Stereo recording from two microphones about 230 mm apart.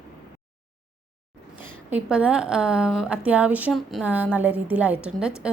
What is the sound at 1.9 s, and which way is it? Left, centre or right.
A woman's voice, centre.